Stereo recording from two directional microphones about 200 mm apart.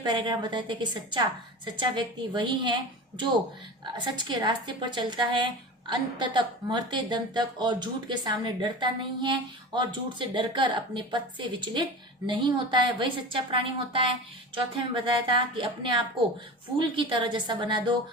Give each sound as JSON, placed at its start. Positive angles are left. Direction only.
{"t": 0.0, "sound": "a woman's voice", "side_deg": -20}
{"t": 3.9, "sound": "a woman's voice", "side_deg": -25}